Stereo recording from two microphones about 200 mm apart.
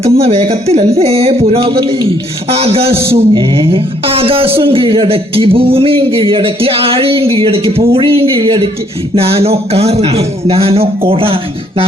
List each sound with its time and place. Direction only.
0.0 s speech: 30° right (ahead or behind)